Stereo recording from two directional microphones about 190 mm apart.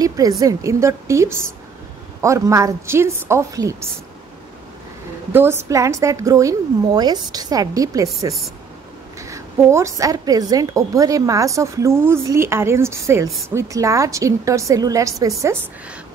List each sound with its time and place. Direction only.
0.4 s a woman's voice: 15° right (ahead or behind)
5.3 s a woman's voice: 10° right (ahead or behind)
9.2 s a woman's voice: 15° right (ahead or behind)